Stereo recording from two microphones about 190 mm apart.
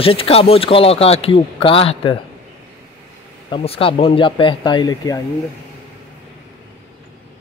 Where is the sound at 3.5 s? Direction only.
30° left (ahead or behind).